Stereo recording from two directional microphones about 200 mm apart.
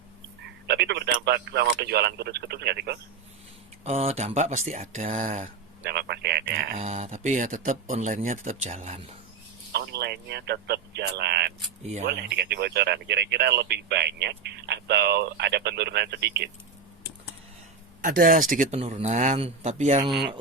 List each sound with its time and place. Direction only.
0.7 s speech: 55° right (ahead or behind)
3.8 s speech: 30° right (ahead or behind)
5.8 s speech: 55° right (ahead or behind)
6.7 s speech: 35° right (ahead or behind)
9.7 s speech: 55° right (ahead or behind)
18.0 s speech: 45° right (ahead or behind)
18.8 s speech: 30° right (ahead or behind)